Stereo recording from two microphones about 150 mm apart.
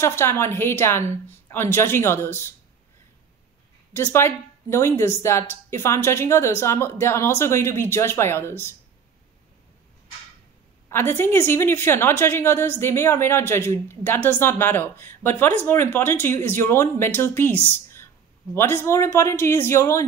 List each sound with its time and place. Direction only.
0.0 s a woman's voice: 15° left (ahead or behind)
3.9 s a woman's voice: 15° left (ahead or behind)
10.9 s a woman's voice: 15° left (ahead or behind)